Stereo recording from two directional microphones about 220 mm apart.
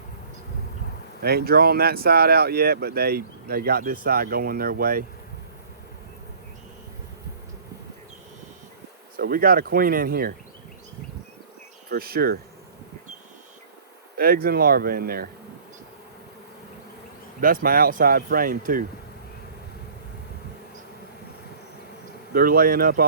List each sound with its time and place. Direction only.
1.2 s speech: 45° right (ahead or behind)
9.1 s speech: 40° right (ahead or behind)
11.9 s speech: 45° right (ahead or behind)
14.2 s speech: 40° right (ahead or behind)
17.4 s speech: 40° right (ahead or behind)
22.3 s speech: 40° right (ahead or behind)